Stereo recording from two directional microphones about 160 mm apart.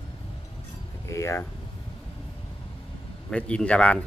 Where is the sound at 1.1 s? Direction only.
20° left (ahead or behind).